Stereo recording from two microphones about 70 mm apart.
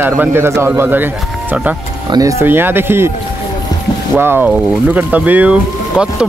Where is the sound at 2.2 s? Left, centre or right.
Right.